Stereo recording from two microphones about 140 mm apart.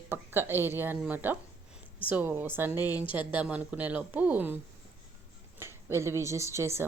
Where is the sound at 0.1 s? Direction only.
15° right (ahead or behind).